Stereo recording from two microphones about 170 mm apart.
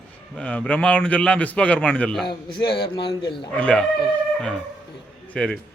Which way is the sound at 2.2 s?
30° left (ahead or behind).